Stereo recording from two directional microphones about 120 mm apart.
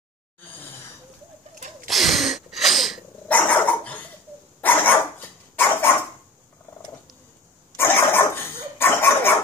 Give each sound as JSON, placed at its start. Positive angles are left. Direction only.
{"t": 1.9, "sound": "a sound", "side_deg": 0}
{"t": 3.3, "sound": "dog", "side_deg": 10}
{"t": 7.7, "sound": "dog", "side_deg": 20}